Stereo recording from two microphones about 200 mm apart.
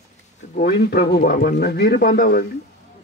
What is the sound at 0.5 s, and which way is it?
Speech, 55° left (ahead or behind).